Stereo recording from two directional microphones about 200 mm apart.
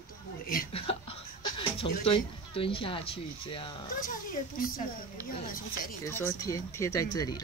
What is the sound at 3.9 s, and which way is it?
Speech, 45° left (ahead or behind).